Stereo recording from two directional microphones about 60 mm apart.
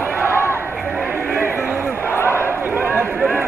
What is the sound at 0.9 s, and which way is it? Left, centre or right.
Music, right.